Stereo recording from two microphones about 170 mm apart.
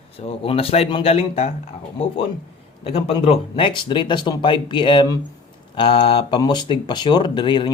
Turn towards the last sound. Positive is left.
turn(degrees=25)  # may be behind; listen again after turning